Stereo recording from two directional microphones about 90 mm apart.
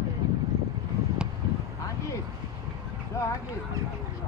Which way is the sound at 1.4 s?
45° right (ahead or behind).